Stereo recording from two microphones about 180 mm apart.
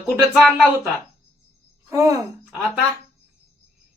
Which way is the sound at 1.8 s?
15° right (ahead or behind).